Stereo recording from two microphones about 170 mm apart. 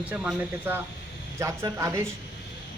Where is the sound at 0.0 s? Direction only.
5° right (ahead or behind).